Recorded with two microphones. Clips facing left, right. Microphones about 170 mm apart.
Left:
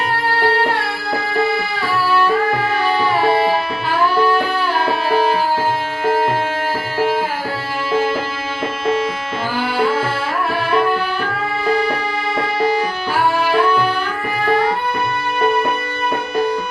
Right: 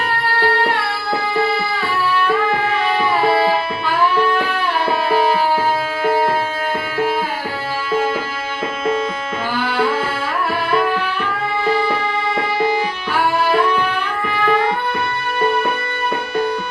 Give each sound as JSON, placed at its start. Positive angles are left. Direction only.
{"t": 11.6, "sound": "music", "side_deg": -30}
{"t": 13.8, "sound": "music", "side_deg": 35}